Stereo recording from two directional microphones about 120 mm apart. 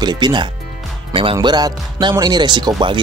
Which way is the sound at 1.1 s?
50° right (ahead or behind).